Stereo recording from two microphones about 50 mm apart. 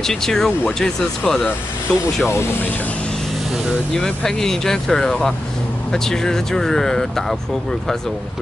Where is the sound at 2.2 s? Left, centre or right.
Left.